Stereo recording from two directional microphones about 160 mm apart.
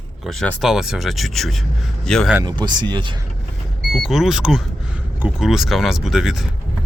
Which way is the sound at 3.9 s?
Centre (ahead or behind).